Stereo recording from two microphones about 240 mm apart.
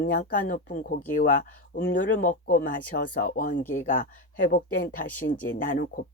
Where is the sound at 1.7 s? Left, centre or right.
Left.